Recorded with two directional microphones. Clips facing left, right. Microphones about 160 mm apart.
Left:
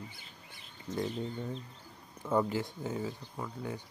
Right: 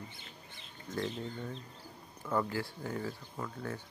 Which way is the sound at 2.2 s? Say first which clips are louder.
Left 3 dB; 20° left (ahead or behind).